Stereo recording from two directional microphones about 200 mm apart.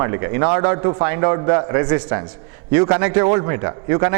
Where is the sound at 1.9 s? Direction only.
10° right (ahead or behind).